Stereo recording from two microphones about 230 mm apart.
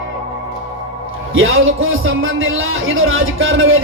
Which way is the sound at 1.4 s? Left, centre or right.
Right.